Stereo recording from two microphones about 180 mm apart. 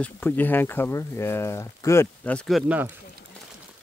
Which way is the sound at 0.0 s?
10° left (ahead or behind).